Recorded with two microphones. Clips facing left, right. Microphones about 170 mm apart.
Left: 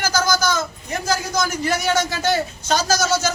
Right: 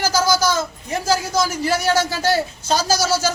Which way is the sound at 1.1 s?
5° right (ahead or behind).